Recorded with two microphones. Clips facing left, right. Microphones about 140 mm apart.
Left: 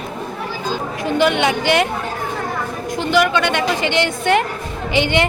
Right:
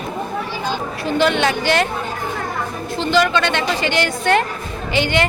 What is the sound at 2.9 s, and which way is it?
A woman's voice, 15° left (ahead or behind).